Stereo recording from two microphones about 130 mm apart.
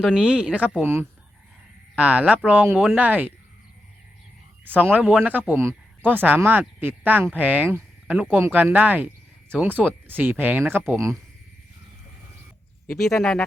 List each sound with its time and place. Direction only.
0.0 s speech: 5° right (ahead or behind)
4.7 s speech: 15° right (ahead or behind)
12.9 s speech: 5° left (ahead or behind)